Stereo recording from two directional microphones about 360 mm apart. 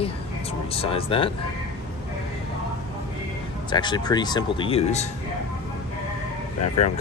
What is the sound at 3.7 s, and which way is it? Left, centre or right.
Speech, centre.